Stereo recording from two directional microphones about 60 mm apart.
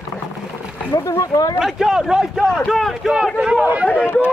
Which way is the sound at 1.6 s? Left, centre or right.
Centre.